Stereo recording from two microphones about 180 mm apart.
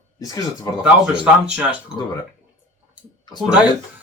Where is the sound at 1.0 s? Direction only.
5° right (ahead or behind).